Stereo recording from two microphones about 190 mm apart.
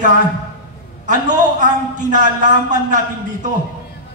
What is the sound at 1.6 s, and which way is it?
Speech, 40° right (ahead or behind).